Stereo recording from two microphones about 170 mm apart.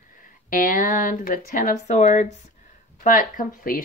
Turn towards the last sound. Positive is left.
turn(degrees=55)  # may be behind; listen again after turning